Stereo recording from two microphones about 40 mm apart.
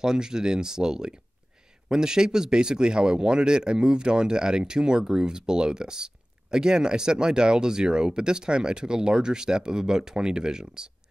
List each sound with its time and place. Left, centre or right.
0.0 s speech: centre